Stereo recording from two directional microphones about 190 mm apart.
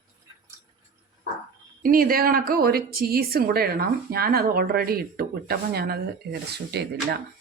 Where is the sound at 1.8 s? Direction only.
50° right (ahead or behind).